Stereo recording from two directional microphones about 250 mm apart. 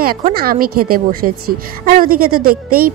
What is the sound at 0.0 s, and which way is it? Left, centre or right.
Speech, right.